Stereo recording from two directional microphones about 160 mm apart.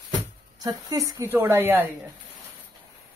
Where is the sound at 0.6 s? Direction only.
25° right (ahead or behind).